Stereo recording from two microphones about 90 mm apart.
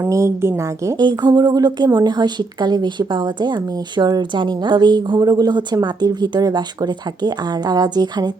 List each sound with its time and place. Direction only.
0.1 s a woman's voice: 35° right (ahead or behind)
0.9 s a woman's voice: 55° right (ahead or behind)